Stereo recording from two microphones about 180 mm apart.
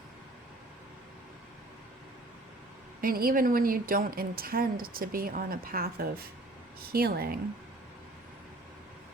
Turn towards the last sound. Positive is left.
turn(degrees=-60)  # may be behind; listen again after turning